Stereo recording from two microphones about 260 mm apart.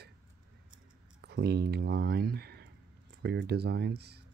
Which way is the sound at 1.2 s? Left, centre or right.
Right.